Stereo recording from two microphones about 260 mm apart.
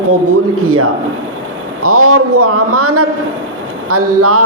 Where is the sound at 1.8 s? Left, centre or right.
Right.